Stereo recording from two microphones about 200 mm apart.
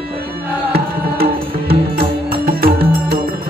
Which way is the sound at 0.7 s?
50° right (ahead or behind).